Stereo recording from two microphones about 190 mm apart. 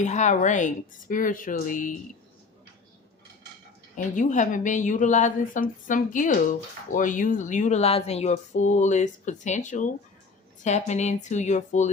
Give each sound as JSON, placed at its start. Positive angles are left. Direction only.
{"t": 0.0, "sound": "speech", "side_deg": 40}
{"t": 3.9, "sound": "speech", "side_deg": 40}